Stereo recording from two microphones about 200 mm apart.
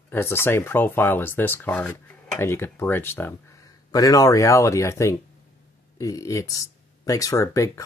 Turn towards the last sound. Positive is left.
turn(degrees=15)  # may be behind; listen again after turning